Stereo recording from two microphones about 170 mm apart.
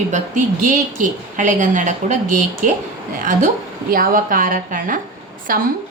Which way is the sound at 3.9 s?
55° right (ahead or behind).